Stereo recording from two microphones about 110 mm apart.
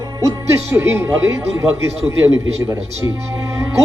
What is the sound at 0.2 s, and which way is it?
Speech, 30° right (ahead or behind).